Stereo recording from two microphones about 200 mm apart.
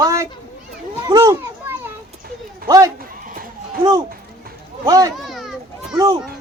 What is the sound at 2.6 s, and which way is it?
Speech, 15° right (ahead or behind).